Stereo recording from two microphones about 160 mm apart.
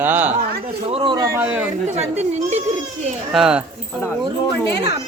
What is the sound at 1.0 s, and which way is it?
Speech, 25° right (ahead or behind).